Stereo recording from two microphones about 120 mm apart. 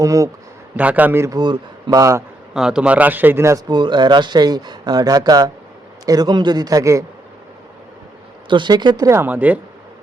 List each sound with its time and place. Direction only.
0.0 s speech: 30° right (ahead or behind)
0.8 s a man's voice: 10° right (ahead or behind)
1.4 s speech: 35° right (ahead or behind)
2.5 s a man's voice: 5° right (ahead or behind); by 3.6 s 20° right (ahead or behind)
3.7 s speech: 40° right (ahead or behind)
8.4 s speech: 40° right (ahead or behind)
9.0 s a man's voice: 20° right (ahead or behind)